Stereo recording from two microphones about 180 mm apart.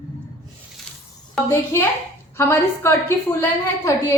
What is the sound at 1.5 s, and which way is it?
A woman's voice, 15° left (ahead or behind).